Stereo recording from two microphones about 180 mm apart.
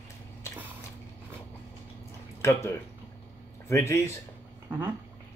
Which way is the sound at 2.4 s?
15° left (ahead or behind).